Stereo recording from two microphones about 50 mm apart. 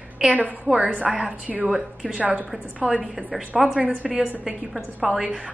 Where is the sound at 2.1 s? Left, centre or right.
Right.